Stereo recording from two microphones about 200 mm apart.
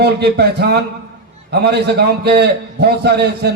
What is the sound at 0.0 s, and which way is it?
A man's voice, 55° right (ahead or behind).